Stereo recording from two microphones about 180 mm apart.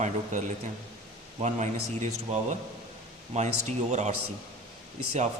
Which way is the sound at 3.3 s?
40° right (ahead or behind).